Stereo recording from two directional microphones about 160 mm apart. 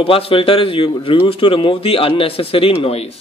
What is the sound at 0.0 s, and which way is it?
A man's voice, 35° left (ahead or behind).